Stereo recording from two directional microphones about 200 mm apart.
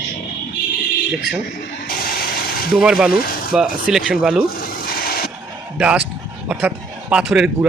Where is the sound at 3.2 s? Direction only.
50° left (ahead or behind).